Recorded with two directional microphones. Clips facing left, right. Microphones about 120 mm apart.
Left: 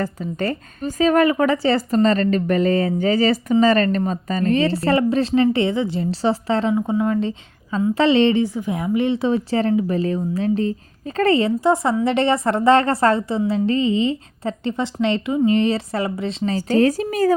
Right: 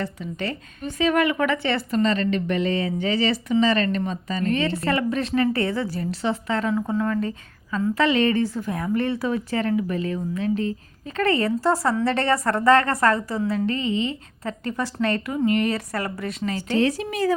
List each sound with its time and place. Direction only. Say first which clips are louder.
0.0 s speech: left 5 dB; 40° left (ahead or behind)
6.7 s a woman's voice: left 2 dB; 20° left (ahead or behind)
8.4 s a woman's voice: left 3 dB; 15° left (ahead or behind)
16.6 s speech: left 5 dB; 40° left (ahead or behind)